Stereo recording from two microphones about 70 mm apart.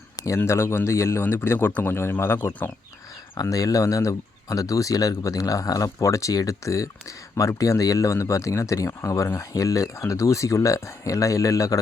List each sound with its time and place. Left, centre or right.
0.3 s speech: left
3.5 s speech: left